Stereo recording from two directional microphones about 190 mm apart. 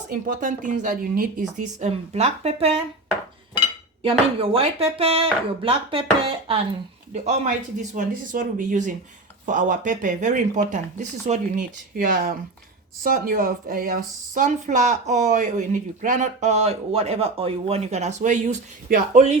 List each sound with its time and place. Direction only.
0.1 s speech: 45° right (ahead or behind)
4.4 s speech: 30° right (ahead or behind)